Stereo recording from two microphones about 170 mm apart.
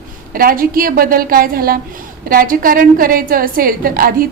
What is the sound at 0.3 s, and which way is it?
A woman's voice, 60° right (ahead or behind).